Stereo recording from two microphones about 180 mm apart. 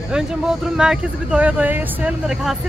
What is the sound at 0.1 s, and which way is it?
Speech, 5° right (ahead or behind).